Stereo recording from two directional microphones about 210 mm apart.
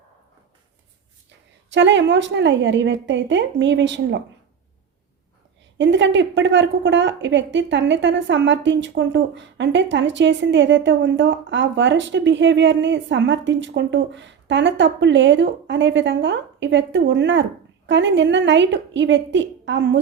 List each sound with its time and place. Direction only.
1.7 s speech: 60° right (ahead or behind)
5.7 s speech: 60° right (ahead or behind)